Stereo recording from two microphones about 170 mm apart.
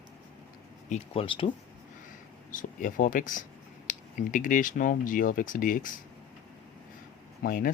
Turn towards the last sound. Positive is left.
turn(degrees=55)  # may be behind; listen again after turning